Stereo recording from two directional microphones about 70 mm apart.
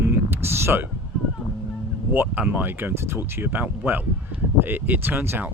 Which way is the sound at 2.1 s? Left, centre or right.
Right.